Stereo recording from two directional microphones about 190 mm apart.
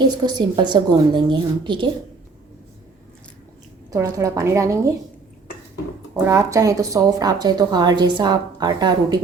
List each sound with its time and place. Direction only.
0.0 s a woman's voice: 20° right (ahead or behind)
3.9 s a woman's voice: 15° right (ahead or behind)
6.2 s a woman's voice: 15° right (ahead or behind)